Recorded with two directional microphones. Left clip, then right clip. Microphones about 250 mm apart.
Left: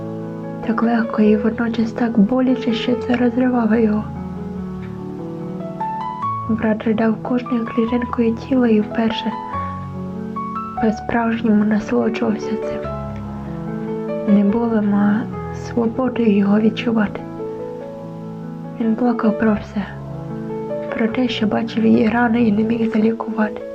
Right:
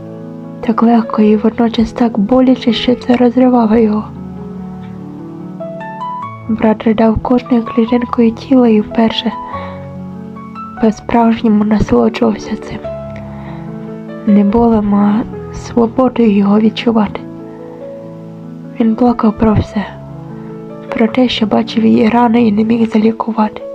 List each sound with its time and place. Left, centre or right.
0.6 s a woman's voice: centre
6.6 s a woman's voice: centre
10.8 s a woman's voice: centre
14.3 s a woman's voice: centre
18.9 s a woman's voice: centre
20.9 s a woman's voice: centre